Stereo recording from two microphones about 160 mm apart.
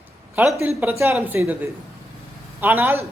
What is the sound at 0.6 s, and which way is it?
A woman's voice, 15° right (ahead or behind).